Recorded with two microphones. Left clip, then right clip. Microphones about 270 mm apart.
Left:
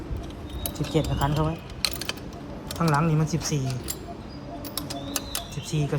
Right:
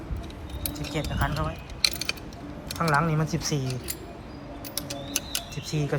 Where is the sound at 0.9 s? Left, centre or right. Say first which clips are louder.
Left 7 dB; centre.